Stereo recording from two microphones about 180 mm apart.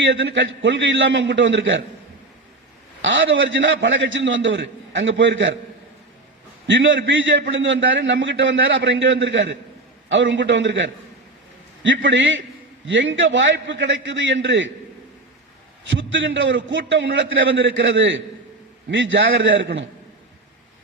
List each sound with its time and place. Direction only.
0.0 s a man's voice: 85° right
3.0 s a man's voice: 90° right
6.7 s a man's voice: 90° right
15.8 s a man's voice: 90° right